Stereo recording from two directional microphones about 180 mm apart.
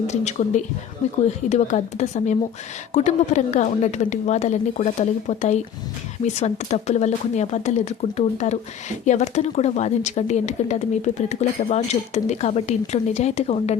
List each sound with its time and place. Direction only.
0.1 s speech: 40° left (ahead or behind)